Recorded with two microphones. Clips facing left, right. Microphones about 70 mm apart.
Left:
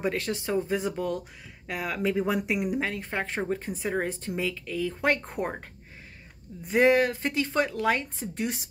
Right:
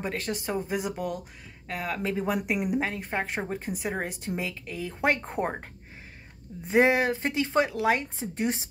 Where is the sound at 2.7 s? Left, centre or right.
Centre.